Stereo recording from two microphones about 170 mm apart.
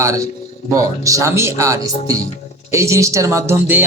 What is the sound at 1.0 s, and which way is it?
A man's voice, 20° right (ahead or behind).